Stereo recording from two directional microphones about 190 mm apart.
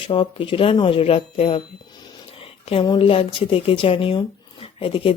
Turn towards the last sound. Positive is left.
turn(degrees=30)  # may be behind; listen again after turning